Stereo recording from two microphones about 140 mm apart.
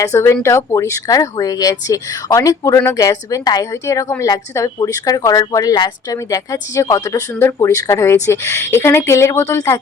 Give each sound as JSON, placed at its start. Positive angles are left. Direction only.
{"t": 0.0, "sound": "speech", "side_deg": 20}